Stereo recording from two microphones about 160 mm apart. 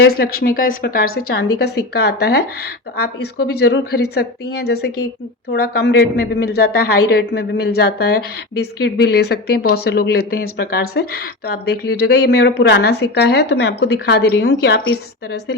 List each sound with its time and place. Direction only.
0.0 s a woman's voice: 70° left (ahead or behind); by 14.5 s 90° left